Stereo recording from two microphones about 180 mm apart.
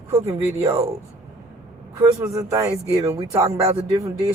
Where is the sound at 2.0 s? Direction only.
15° right (ahead or behind).